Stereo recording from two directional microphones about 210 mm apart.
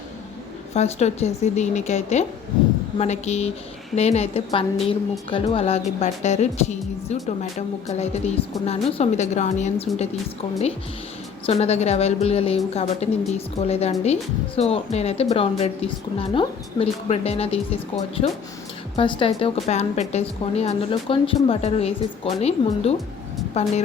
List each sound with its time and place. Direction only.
0.7 s a woman's voice: 30° left (ahead or behind)
11.4 s a woman's voice: 30° left (ahead or behind)